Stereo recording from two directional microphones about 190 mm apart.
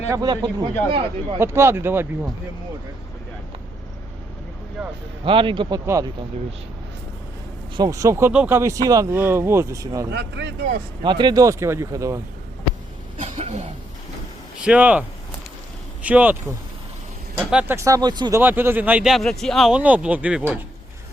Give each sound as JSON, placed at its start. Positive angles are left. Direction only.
{"t": 0.1, "sound": "speech", "side_deg": -20}
{"t": 1.4, "sound": "speech", "side_deg": -15}
{"t": 4.8, "sound": "speech", "side_deg": -5}
{"t": 5.2, "sound": "speech", "side_deg": -25}
{"t": 7.8, "sound": "speech", "side_deg": -20}
{"t": 10.1, "sound": "speech", "side_deg": -65}
{"t": 11.0, "sound": "speech", "side_deg": -25}
{"t": 13.2, "sound": "cough", "side_deg": -35}
{"t": 14.6, "sound": "speech", "side_deg": -5}
{"t": 16.0, "sound": "speech", "side_deg": -10}